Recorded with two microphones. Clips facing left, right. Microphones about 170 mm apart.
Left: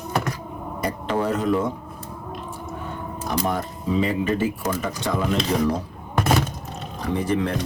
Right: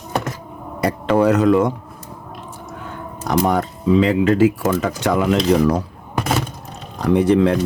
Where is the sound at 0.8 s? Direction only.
80° right.